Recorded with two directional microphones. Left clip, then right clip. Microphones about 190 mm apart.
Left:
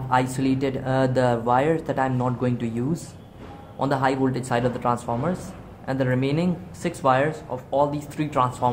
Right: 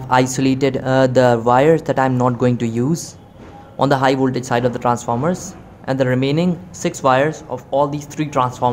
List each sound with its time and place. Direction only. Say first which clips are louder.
0.1 s speech: right 7 dB; 40° right (ahead or behind)